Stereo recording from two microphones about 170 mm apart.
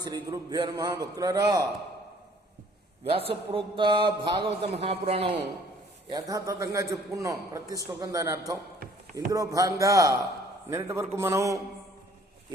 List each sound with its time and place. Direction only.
0.0 s a man's voice: 25° right (ahead or behind)
3.1 s a man's voice: 35° right (ahead or behind)
6.1 s a man's voice: 20° right (ahead or behind)